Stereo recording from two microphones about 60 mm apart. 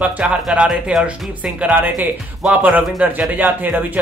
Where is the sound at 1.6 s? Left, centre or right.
Right.